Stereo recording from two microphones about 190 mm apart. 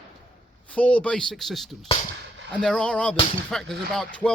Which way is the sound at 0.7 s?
5° left (ahead or behind).